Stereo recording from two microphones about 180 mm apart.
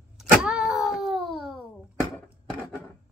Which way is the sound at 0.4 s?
5° right (ahead or behind).